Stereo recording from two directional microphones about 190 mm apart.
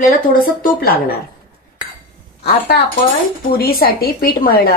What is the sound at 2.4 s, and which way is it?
A woman's voice, 55° left (ahead or behind).